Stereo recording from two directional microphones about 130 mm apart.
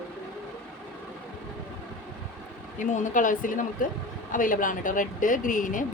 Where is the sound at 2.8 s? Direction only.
85° left.